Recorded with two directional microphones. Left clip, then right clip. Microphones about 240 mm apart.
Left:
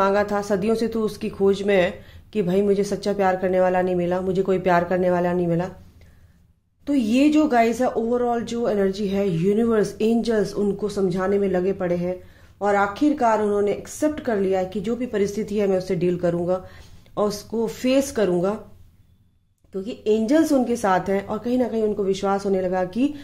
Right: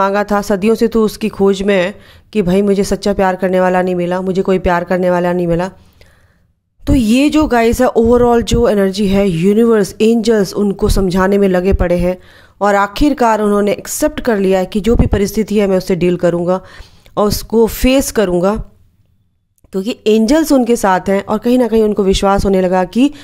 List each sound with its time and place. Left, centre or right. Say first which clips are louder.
0.0 s speech: right 7 dB; right
6.8 s speech: right 7 dB; right
19.7 s speech: right 9 dB; right